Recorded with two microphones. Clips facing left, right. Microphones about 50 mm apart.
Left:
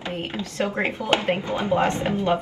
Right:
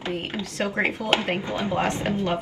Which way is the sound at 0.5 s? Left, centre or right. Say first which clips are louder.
Even; right.